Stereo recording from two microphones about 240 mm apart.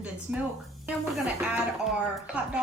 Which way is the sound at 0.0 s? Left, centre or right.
Centre.